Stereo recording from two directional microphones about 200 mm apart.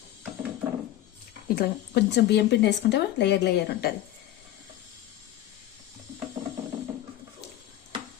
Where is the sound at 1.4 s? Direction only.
50° left (ahead or behind).